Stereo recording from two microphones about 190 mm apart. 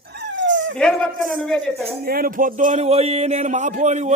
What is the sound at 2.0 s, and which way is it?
A man's voice, 50° right (ahead or behind).